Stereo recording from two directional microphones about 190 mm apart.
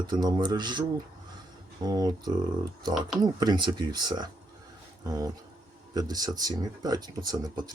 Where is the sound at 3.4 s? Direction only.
25° right (ahead or behind).